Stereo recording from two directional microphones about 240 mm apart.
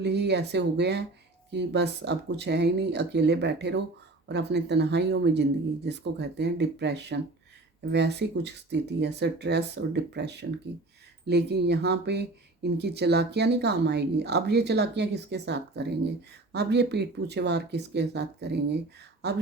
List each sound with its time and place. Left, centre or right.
0.0 s speech: right